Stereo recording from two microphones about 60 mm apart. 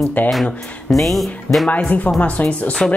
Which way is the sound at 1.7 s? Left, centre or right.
Left.